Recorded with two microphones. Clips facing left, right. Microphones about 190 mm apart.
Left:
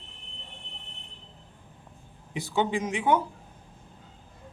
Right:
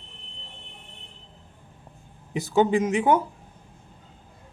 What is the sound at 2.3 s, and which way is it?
Speech, 45° right (ahead or behind).